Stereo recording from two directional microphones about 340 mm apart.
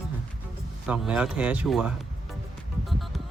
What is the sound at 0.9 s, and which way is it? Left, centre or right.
Speech, centre.